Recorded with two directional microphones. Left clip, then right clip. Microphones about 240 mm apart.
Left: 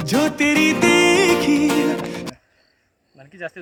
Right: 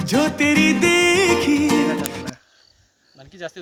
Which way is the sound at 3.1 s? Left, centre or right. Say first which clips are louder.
Left 1 dB; centre.